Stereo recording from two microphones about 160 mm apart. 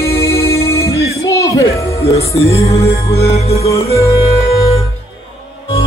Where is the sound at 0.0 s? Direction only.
20° left (ahead or behind).